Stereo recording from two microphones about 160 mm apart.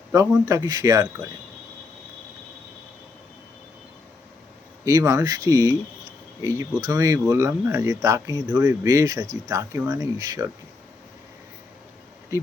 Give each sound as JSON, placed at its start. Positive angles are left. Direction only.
{"t": 0.1, "sound": "speech", "side_deg": -20}
{"t": 4.9, "sound": "speech", "side_deg": -20}